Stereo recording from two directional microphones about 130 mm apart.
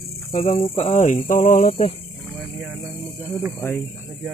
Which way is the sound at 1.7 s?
50° left (ahead or behind).